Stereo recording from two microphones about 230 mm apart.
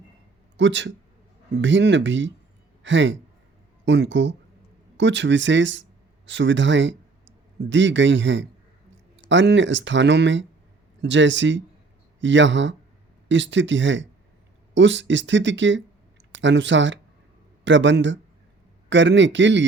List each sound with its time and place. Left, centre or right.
0.5 s speech: right